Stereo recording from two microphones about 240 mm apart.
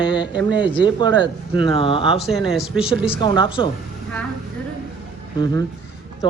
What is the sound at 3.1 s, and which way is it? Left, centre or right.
Speech, centre.